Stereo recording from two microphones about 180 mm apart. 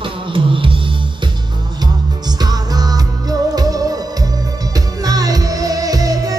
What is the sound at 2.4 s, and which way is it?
Music, 20° right (ahead or behind).